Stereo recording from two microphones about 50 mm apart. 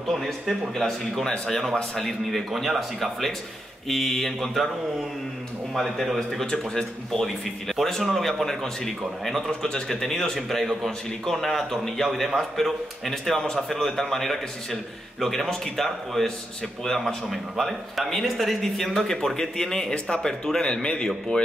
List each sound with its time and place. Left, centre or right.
0.1 s speech: centre
6.1 s speech: centre
9.5 s speech: centre